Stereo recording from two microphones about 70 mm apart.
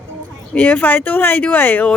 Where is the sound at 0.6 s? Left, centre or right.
Left.